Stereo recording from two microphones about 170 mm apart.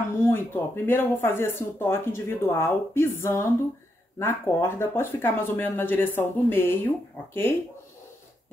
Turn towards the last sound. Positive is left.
turn(degrees=15)  # may be behind; listen again after turning